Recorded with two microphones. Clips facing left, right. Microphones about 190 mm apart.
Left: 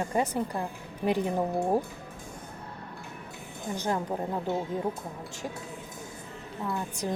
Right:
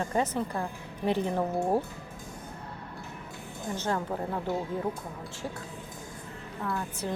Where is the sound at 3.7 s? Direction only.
15° left (ahead or behind).